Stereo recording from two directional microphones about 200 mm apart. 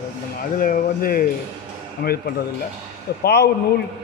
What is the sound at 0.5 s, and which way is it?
Speech, 45° left (ahead or behind).